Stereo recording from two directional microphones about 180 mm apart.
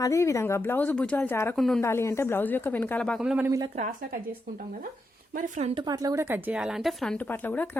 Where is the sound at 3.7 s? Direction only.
45° right (ahead or behind).